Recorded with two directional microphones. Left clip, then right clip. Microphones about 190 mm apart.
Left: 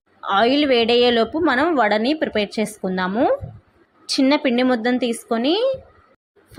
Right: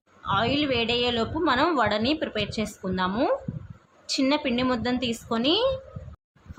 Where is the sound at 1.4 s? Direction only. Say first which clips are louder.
Left 5 dB; 15° left (ahead or behind).